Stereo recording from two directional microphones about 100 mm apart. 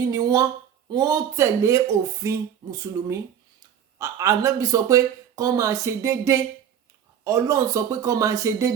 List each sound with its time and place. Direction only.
0.1 s speech: 35° right (ahead or behind)